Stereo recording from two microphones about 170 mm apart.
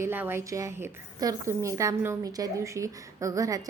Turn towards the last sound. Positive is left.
turn(degrees=-20)  # may be behind; listen again after turning